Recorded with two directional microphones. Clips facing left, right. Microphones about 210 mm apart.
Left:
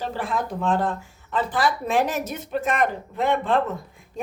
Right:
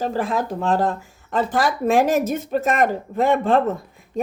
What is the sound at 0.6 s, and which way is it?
A woman's voice, 40° right (ahead or behind).